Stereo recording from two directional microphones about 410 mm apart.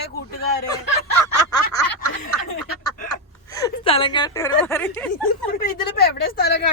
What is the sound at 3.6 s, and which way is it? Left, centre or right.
Speech, centre.